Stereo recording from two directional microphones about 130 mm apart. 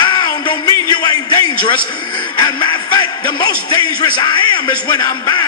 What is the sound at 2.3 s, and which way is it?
Speech, 35° left (ahead or behind).